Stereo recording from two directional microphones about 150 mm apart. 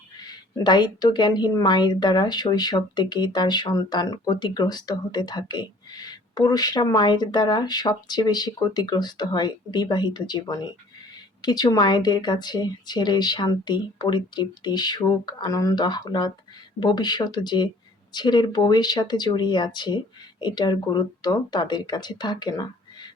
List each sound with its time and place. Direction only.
0.3 s a woman's voice: 30° left (ahead or behind)